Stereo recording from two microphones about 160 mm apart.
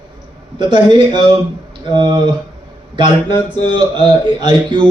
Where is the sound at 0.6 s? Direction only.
30° right (ahead or behind).